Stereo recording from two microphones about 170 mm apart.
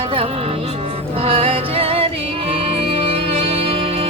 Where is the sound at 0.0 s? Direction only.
35° right (ahead or behind).